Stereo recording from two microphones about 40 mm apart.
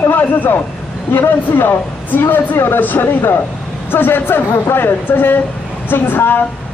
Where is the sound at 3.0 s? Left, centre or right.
Left.